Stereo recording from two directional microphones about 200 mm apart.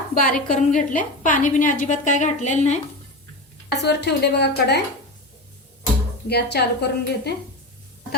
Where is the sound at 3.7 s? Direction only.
55° left (ahead or behind).